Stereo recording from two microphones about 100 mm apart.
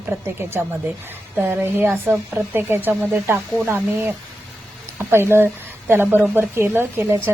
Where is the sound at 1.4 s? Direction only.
20° right (ahead or behind).